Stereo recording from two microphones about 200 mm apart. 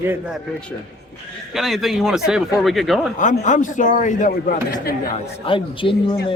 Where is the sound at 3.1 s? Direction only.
40° left (ahead or behind).